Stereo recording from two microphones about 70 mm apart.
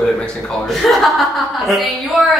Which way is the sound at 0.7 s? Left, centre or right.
Centre.